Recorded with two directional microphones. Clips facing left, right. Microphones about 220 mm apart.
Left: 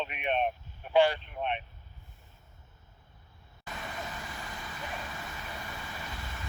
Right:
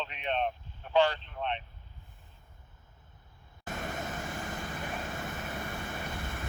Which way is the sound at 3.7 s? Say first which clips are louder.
Right 4 dB; 50° right (ahead or behind).